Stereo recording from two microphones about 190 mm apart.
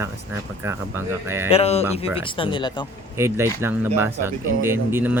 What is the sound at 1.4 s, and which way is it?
Speech, 30° left (ahead or behind).